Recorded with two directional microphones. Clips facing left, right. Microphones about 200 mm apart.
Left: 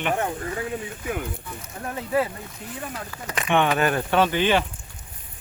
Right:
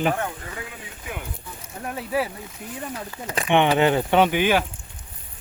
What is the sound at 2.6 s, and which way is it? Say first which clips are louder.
Speech: right 2 dB; 10° right (ahead or behind).